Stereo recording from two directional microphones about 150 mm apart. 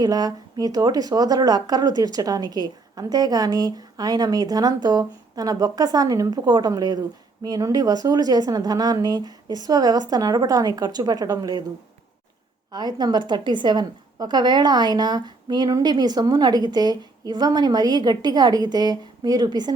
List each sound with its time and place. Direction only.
0.0 s a woman's voice: 25° right (ahead or behind)
12.7 s a woman's voice: 30° right (ahead or behind)